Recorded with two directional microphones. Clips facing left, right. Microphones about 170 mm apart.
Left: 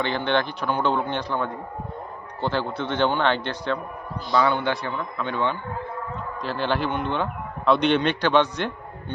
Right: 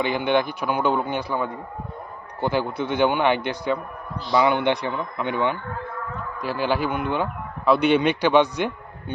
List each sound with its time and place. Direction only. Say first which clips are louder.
0.0 s a man's voice: right 2 dB; 10° right (ahead or behind)